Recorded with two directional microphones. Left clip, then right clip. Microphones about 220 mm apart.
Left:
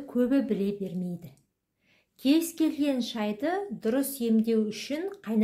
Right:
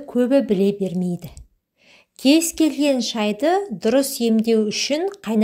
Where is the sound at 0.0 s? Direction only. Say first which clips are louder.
Right 9 dB; 30° right (ahead or behind).